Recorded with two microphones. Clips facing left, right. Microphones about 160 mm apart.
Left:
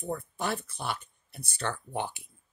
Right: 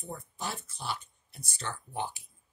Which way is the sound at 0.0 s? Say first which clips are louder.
Left 6 dB; 60° left (ahead or behind).